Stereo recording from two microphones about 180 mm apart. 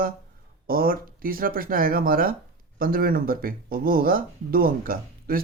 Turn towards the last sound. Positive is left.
turn(degrees=-55)  # may be behind; listen again after turning